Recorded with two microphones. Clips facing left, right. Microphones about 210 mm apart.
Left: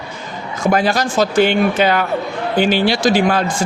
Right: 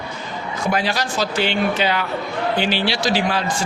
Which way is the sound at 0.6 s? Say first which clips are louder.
Left 6 dB; 45° left (ahead or behind).